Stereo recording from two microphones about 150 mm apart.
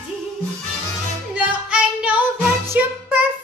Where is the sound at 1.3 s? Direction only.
10° right (ahead or behind).